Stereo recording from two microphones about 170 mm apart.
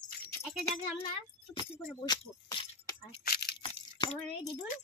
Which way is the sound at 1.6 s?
25° left (ahead or behind).